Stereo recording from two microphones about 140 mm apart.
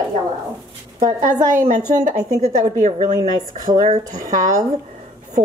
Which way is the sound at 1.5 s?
65° right (ahead or behind).